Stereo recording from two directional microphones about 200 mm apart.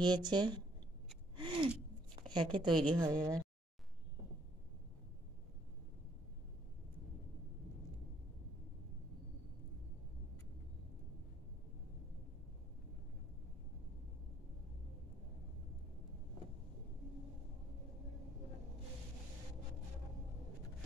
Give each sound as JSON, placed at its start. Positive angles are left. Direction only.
{"t": 0.0, "sound": "speech", "side_deg": -20}
{"t": 1.3, "sound": "gasp", "side_deg": -25}
{"t": 2.2, "sound": "speech", "side_deg": -20}